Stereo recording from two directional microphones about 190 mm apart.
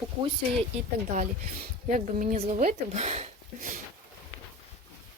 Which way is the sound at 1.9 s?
40° right (ahead or behind).